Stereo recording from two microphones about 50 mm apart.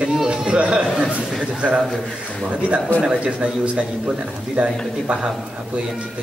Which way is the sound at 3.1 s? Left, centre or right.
Right.